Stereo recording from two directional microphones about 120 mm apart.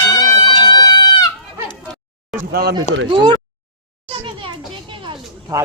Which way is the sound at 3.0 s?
40° right (ahead or behind).